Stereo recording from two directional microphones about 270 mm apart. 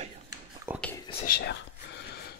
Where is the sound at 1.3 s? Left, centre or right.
Left.